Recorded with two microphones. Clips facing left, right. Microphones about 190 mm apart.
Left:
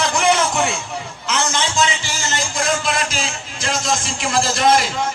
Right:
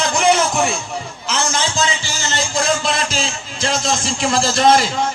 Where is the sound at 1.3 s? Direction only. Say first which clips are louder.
Even; 30° right (ahead or behind).